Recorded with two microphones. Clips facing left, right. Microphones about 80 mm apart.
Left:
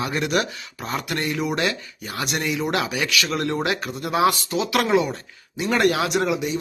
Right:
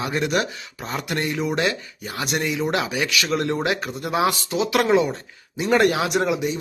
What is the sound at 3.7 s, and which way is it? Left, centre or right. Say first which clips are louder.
Speech: even; centre.